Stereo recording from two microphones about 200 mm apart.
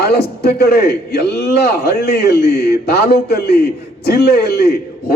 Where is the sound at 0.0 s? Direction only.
55° left (ahead or behind).